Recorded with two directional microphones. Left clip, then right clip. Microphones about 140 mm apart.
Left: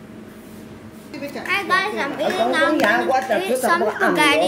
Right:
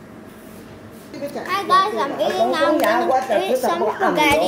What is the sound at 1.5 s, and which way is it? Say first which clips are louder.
Speech: right 3 dB; 15° left (ahead or behind).